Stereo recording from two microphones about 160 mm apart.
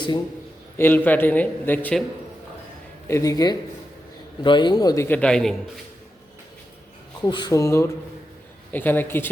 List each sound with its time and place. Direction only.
0.8 s a man's voice: 10° left (ahead or behind)
3.1 s speech: 20° left (ahead or behind)
5.0 s a man's voice: 10° left (ahead or behind)
7.2 s a man's voice: 25° left (ahead or behind)